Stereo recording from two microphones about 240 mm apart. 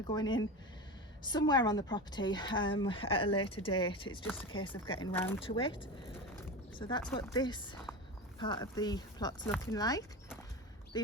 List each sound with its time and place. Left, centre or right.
0.1 s a woman's voice: centre
5.1 s a woman's voice: centre
5.5 s a woman's voice: left